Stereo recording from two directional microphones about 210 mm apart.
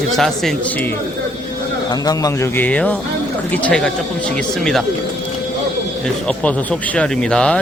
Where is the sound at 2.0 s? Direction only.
15° left (ahead or behind).